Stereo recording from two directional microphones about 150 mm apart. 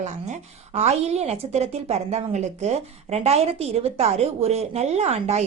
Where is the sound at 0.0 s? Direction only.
50° right (ahead or behind).